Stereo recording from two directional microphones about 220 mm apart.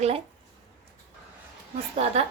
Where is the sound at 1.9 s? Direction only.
30° right (ahead or behind).